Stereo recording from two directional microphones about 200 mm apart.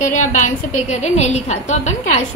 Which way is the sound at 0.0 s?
40° left (ahead or behind).